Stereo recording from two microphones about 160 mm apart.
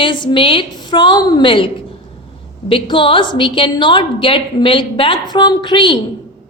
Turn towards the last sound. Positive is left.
turn(degrees=30)  # may be behind; listen again after turning